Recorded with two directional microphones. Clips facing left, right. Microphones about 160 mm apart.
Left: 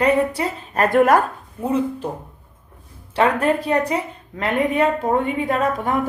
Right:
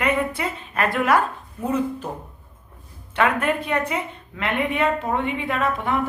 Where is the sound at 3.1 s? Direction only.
35° left (ahead or behind).